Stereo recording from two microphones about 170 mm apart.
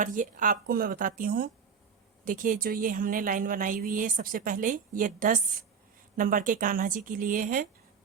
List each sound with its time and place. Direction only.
0.0 s a woman's voice: 50° right (ahead or behind)